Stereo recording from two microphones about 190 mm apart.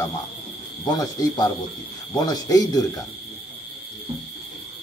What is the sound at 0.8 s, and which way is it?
A man's voice, 20° left (ahead or behind).